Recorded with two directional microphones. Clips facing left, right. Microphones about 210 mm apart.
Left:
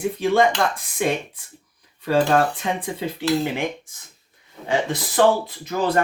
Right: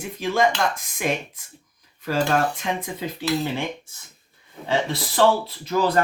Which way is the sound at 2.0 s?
35° left (ahead or behind).